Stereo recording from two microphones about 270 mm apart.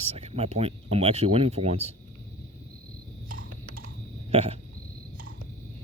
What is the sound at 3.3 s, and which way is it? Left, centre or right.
Typing, right.